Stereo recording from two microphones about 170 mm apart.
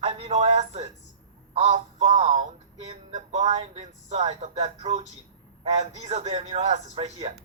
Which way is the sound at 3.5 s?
40° right (ahead or behind).